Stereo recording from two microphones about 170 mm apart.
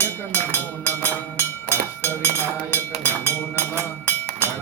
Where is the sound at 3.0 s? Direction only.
10° left (ahead or behind).